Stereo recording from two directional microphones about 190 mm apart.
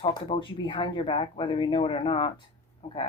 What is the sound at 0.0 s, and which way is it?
Speech, 25° left (ahead or behind).